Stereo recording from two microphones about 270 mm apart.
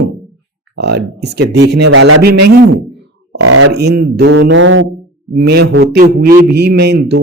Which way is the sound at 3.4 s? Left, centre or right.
Right.